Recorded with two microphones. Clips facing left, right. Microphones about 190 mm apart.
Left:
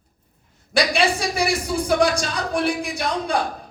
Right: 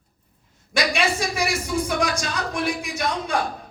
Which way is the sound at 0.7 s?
35° left (ahead or behind).